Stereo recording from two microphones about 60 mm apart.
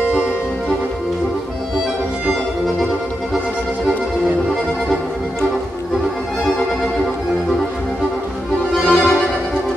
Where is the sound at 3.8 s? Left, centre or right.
Centre.